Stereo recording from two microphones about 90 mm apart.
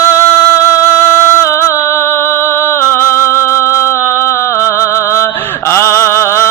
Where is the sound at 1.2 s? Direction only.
30° left (ahead or behind).